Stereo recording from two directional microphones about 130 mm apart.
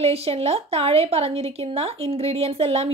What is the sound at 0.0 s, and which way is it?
A woman's voice, 50° right (ahead or behind).